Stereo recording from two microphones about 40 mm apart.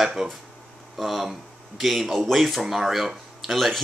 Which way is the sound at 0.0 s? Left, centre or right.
Centre.